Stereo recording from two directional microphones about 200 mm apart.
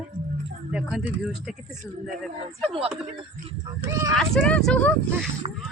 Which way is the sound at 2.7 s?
30° right (ahead or behind).